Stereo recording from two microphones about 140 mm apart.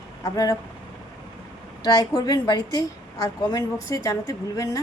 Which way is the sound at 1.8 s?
30° left (ahead or behind).